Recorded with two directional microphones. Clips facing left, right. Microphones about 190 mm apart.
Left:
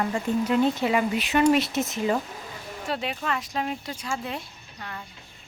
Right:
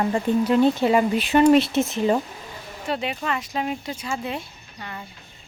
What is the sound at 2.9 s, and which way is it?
Speech, centre (ahead or behind).